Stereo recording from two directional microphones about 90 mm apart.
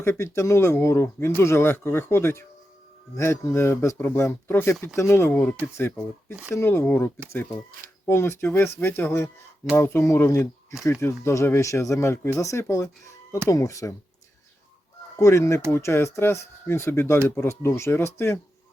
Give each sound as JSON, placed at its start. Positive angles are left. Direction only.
{"t": 0.0, "sound": "speech", "side_deg": 30}
{"t": 5.3, "sound": "speech", "side_deg": 15}
{"t": 5.7, "sound": "speech", "side_deg": 25}
{"t": 15.2, "sound": "speech", "side_deg": 35}